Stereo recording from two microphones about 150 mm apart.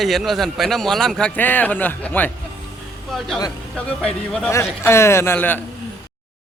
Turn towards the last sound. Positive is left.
turn(degrees=15)  # may be behind; listen again after turning